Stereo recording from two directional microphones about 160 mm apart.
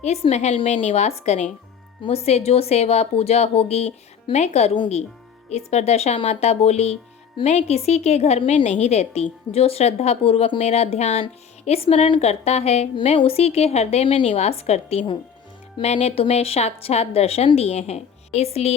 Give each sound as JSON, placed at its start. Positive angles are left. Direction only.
{"t": 0.0, "sound": "a woman's voice", "side_deg": 40}